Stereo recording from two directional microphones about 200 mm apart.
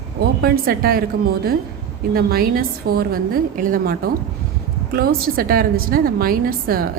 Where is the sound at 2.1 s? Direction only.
45° right (ahead or behind).